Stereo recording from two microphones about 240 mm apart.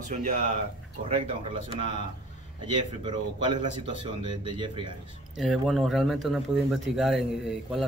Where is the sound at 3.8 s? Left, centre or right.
Centre.